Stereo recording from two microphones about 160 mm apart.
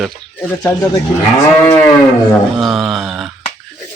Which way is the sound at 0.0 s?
Centre (ahead or behind).